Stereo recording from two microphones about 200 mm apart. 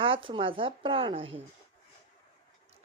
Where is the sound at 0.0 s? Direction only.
25° right (ahead or behind).